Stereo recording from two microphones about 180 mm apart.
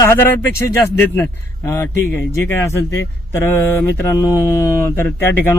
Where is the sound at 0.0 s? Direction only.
10° left (ahead or behind).